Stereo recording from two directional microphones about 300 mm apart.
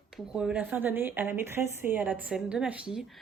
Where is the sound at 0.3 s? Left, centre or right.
Centre.